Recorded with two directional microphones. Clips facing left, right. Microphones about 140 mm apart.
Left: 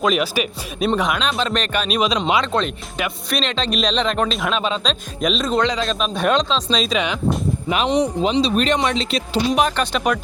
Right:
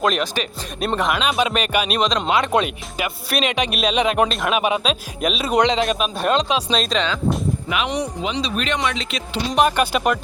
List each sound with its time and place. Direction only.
0.0 s speech: 5° left (ahead or behind)
2.0 s speech: 5° left (ahead or behind)
2.4 s speech: 10° right (ahead or behind)
6.0 s speech: 5° right (ahead or behind)
7.9 s speech: 25° left (ahead or behind)
9.6 s speech: 10° right (ahead or behind)